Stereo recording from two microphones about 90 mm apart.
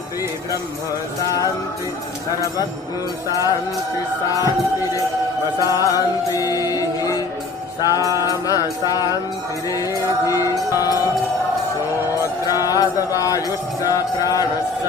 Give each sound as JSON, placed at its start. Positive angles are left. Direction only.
{"t": 1.2, "sound": "music", "side_deg": 40}
{"t": 3.3, "sound": "music", "side_deg": 40}
{"t": 5.6, "sound": "music", "side_deg": 40}
{"t": 12.4, "sound": "music", "side_deg": 40}